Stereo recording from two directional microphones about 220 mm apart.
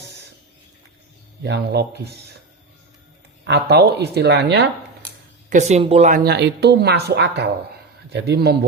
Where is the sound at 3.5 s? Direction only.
50° right (ahead or behind).